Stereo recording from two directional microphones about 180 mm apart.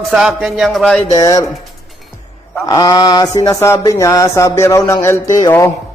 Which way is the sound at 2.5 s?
20° left (ahead or behind).